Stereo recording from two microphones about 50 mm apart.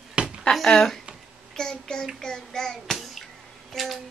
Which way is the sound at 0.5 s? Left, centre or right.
Centre.